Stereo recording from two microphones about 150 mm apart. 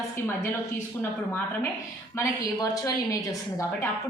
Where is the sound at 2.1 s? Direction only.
20° left (ahead or behind).